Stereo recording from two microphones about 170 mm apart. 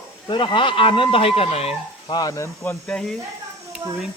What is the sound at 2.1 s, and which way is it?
Speech, 20° left (ahead or behind).